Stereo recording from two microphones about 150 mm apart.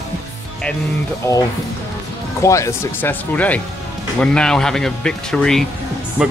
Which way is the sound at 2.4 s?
20° left (ahead or behind).